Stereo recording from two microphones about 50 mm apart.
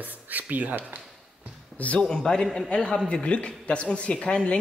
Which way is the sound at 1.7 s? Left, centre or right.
Left.